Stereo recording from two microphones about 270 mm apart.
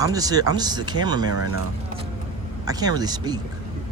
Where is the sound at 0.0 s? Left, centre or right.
Centre.